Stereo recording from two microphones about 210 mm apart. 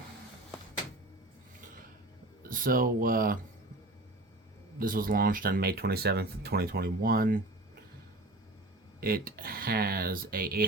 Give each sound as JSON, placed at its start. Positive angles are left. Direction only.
{"t": 2.4, "sound": "speech", "side_deg": -40}
{"t": 4.8, "sound": "speech", "side_deg": -40}
{"t": 9.0, "sound": "speech", "side_deg": -45}